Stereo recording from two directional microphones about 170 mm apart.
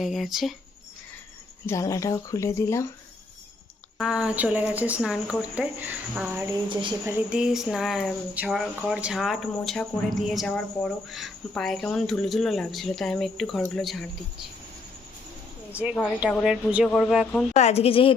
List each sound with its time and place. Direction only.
0.0 s speech: centre (ahead or behind)
1.6 s speech: 20° left (ahead or behind)
3.9 s speech: 5° right (ahead or behind)
16.4 s speech: 5° right (ahead or behind)
17.5 s a woman's voice: 40° left (ahead or behind)